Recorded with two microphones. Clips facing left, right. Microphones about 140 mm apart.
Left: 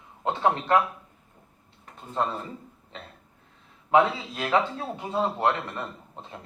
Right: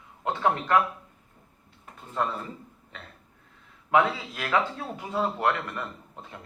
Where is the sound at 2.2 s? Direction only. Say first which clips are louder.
Left 1 dB; 25° left (ahead or behind).